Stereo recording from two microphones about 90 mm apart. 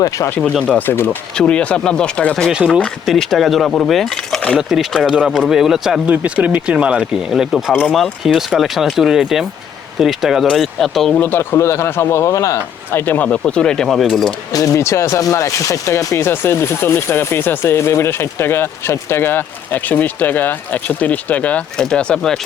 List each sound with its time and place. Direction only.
0.3 s speech: 15° left (ahead or behind)
1.4 s speech: 10° left (ahead or behind)
4.5 s speech: 5° right (ahead or behind)
6.1 s speech: 15° right (ahead or behind); by 11.1 s centre (ahead or behind)
11.1 s speech: 20° left (ahead or behind); by 12.5 s 35° left (ahead or behind)
12.9 s speech: 25° left (ahead or behind); by 14.3 s centre (ahead or behind)
14.5 s speech: 35° left (ahead or behind); by 22.4 s 10° left (ahead or behind)